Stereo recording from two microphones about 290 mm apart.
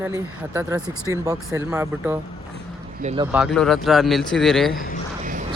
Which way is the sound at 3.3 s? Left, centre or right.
Centre.